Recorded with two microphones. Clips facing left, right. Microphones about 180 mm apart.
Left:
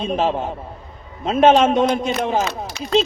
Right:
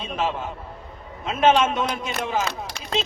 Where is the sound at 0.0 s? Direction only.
35° left (ahead or behind).